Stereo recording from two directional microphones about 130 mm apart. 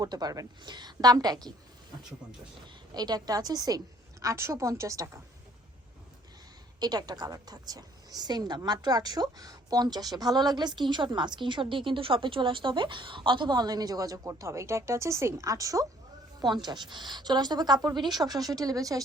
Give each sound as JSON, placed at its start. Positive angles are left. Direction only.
{"t": 0.0, "sound": "a woman's voice", "side_deg": -30}
{"t": 2.9, "sound": "a woman's voice", "side_deg": -30}
{"t": 6.7, "sound": "a woman's voice", "side_deg": -30}